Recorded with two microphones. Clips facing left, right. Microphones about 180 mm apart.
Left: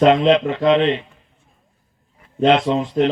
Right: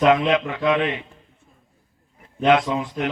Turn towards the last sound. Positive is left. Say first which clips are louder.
# left 7 dB
turn(degrees=30)  # may be behind; listen again after turning